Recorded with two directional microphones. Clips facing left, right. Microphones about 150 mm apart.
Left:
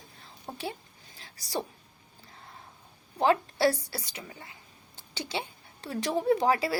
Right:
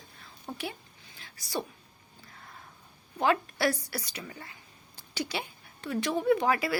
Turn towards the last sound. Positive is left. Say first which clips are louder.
# left 1 dB
turn(degrees=30)  # may be behind; listen again after turning